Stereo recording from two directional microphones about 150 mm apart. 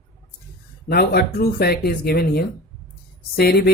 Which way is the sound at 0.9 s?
90° left.